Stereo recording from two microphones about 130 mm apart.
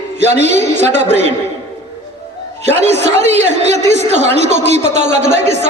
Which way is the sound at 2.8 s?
55° right (ahead or behind).